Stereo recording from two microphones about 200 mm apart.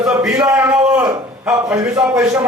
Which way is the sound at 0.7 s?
5° right (ahead or behind).